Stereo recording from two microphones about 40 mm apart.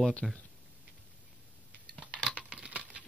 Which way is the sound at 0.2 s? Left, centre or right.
Right.